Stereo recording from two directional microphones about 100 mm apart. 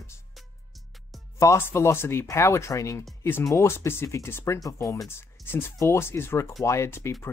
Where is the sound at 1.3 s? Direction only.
30° left (ahead or behind).